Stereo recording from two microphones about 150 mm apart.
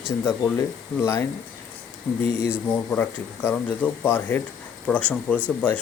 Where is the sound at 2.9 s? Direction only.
10° left (ahead or behind).